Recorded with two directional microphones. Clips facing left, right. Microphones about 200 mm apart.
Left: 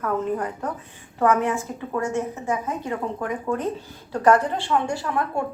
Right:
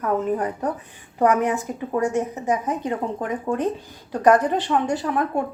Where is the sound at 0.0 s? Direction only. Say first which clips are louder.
Right 2 dB; 20° right (ahead or behind).